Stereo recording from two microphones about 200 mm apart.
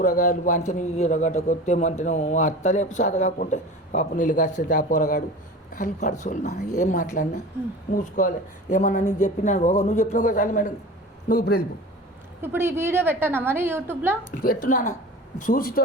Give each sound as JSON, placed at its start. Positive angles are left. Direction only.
{"t": 0.0, "sound": "a man's voice", "side_deg": 40}
{"t": 11.3, "sound": "a man's voice", "side_deg": 50}
{"t": 12.4, "sound": "a woman's voice", "side_deg": -10}
{"t": 14.3, "sound": "a man's voice", "side_deg": 45}